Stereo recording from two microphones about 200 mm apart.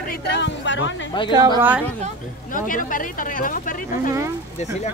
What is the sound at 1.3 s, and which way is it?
Speech, 20° right (ahead or behind).